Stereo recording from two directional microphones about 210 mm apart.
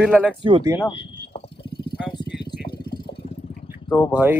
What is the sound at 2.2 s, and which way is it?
Vehicle, 50° left (ahead or behind).